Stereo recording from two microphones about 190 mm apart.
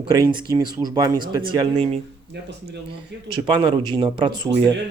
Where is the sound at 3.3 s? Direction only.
25° right (ahead or behind).